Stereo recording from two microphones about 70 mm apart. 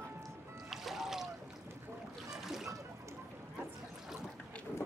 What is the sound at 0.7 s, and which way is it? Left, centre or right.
Music, centre.